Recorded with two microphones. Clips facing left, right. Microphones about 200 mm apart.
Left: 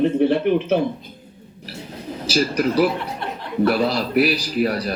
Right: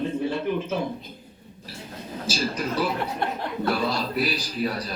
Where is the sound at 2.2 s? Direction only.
75° left (ahead or behind).